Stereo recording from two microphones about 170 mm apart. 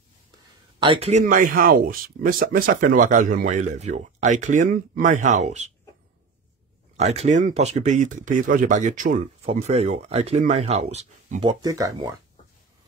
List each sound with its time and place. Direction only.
0.7 s a man's voice: 30° right (ahead or behind)
1.2 s speech: 55° right (ahead or behind)
7.0 s speech: 40° right (ahead or behind)
11.4 s speech: 20° right (ahead or behind)